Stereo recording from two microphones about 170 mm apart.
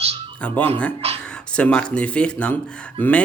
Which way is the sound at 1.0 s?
35° right (ahead or behind).